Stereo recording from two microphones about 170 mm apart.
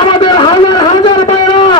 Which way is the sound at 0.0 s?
30° left (ahead or behind).